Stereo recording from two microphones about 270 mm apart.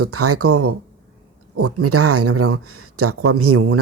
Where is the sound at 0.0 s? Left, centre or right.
Right.